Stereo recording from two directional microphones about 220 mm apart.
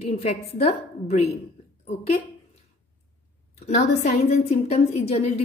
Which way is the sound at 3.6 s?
30° left (ahead or behind).